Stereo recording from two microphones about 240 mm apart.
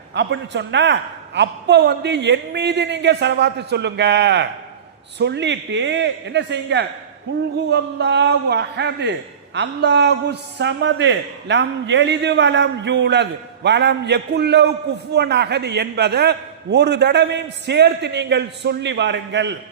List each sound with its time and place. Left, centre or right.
0.1 s a man's voice: right